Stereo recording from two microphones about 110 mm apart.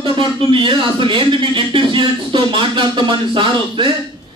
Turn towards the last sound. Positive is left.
turn(degrees=-50)  # may be behind; listen again after turning